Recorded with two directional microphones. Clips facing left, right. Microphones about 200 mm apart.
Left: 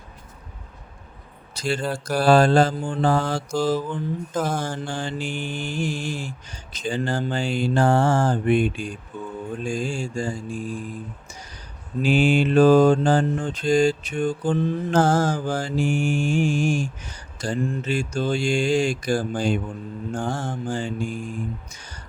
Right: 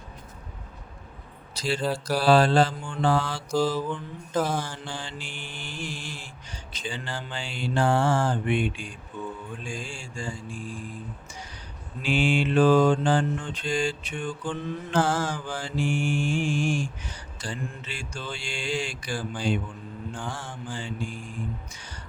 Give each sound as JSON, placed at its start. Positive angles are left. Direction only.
{"t": 1.5, "sound": "a man's voice", "side_deg": 50}
{"t": 1.8, "sound": "a sound", "side_deg": -5}
{"t": 2.1, "sound": "mantra", "side_deg": 45}
{"t": 4.4, "sound": "mantra", "side_deg": 45}
{"t": 12.0, "sound": "mantra", "side_deg": 40}